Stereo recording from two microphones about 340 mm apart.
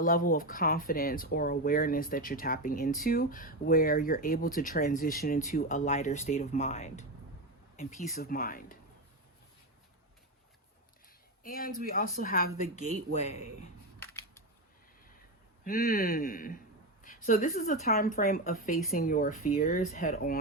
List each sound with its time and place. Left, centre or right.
0.0 s speech: left
11.4 s speech: left
14.0 s a sound: centre
15.6 s speech: left